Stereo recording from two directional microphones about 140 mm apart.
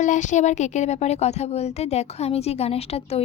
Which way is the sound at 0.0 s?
60° left (ahead or behind).